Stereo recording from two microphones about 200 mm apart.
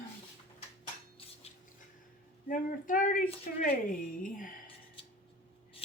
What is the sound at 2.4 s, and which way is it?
A woman's voice, 40° left (ahead or behind).